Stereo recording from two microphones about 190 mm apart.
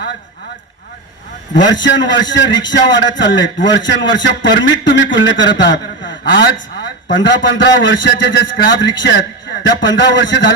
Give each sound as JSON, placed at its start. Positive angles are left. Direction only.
{"t": 1.5, "sound": "a man's voice", "side_deg": 70}